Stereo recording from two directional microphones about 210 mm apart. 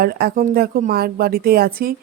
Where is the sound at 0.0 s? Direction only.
45° right (ahead or behind).